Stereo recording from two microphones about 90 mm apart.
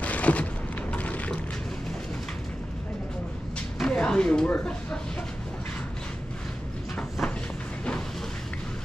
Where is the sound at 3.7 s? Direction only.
10° left (ahead or behind).